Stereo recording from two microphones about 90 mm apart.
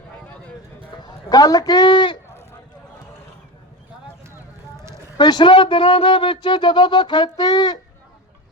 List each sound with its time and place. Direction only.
0.9 s a man's voice: 50° left (ahead or behind)
5.1 s speech: 55° left (ahead or behind)